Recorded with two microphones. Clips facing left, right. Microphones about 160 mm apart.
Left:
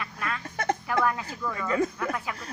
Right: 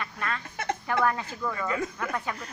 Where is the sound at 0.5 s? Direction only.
35° left (ahead or behind).